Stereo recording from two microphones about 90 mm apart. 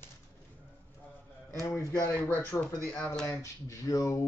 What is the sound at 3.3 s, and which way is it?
Speech, 35° left (ahead or behind).